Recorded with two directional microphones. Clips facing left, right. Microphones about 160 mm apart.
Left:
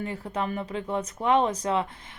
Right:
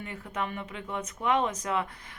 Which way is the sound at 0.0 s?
35° left (ahead or behind).